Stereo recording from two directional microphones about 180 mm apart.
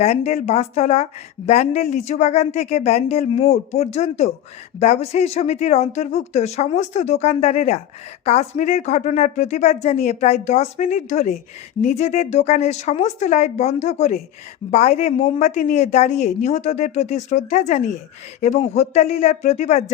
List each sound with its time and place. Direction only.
0.0 s a woman's voice: 35° left (ahead or behind)